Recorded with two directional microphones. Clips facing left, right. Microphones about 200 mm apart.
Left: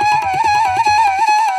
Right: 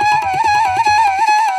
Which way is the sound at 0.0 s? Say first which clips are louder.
Even; centre (ahead or behind).